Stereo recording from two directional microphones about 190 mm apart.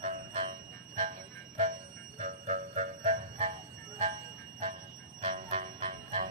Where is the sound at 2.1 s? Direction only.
40° right (ahead or behind).